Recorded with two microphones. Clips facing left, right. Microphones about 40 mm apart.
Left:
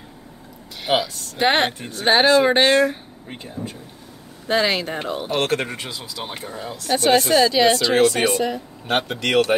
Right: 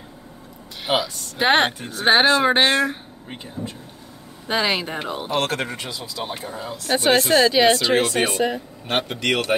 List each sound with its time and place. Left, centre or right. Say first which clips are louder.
0.8 s speech: left 1 dB; centre
4.5 s speech: left 2 dB; centre
5.8 s speech: right 1 dB; centre
6.4 s speech: even; centre
6.9 s speech: left 1 dB; centre
8.8 s speech: left 1 dB; centre